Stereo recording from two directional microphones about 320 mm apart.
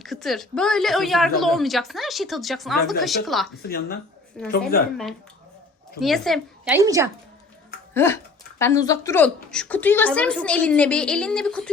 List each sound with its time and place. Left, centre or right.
0.0 s a woman's voice: centre
3.6 s speech: left
4.4 s a woman's voice: centre
6.0 s a woman's voice: centre
7.9 s a woman's voice: centre